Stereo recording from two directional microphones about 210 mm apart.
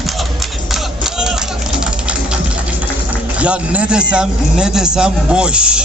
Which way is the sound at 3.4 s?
5° right (ahead or behind).